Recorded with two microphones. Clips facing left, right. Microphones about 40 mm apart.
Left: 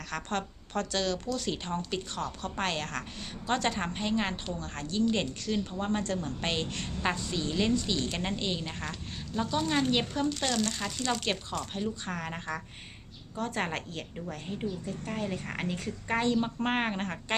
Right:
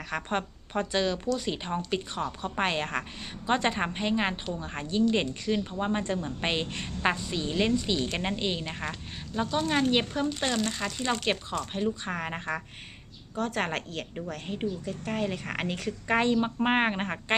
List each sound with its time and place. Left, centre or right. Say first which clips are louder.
0.1 s a woman's voice: right 3 dB; centre
13.3 s a woman's voice: right 3 dB; centre
15.5 s a woman's voice: right 3 dB; right
16.3 s speech: right 4 dB; centre